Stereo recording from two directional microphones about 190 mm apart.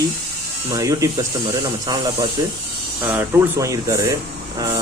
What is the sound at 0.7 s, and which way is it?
Speech, 20° right (ahead or behind).